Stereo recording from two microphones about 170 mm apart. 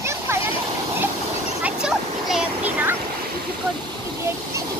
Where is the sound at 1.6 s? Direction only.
5° right (ahead or behind).